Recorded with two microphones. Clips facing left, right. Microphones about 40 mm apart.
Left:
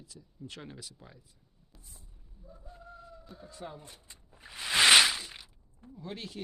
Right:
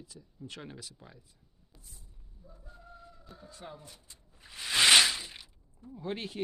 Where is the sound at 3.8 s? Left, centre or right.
Left.